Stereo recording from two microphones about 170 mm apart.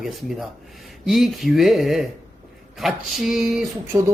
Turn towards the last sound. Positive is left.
turn(degrees=-20)  # may be behind; listen again after turning